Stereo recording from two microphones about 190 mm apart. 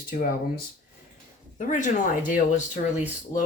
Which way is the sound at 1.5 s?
40° left (ahead or behind).